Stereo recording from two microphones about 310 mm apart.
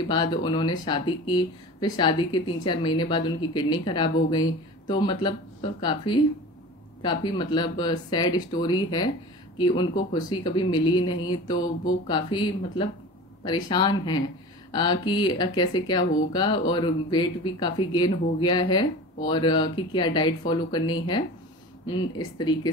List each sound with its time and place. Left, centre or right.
0.1 s speech: centre